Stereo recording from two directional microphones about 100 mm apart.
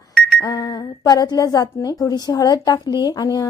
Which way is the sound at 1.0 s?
40° left (ahead or behind).